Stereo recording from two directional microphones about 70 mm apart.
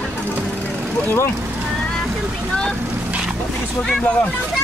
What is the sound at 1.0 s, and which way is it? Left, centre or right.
Speech, left.